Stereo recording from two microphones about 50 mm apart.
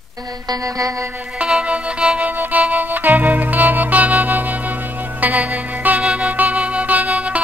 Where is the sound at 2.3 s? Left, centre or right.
Right.